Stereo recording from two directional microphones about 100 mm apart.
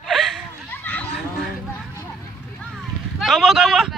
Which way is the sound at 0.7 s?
20° left (ahead or behind).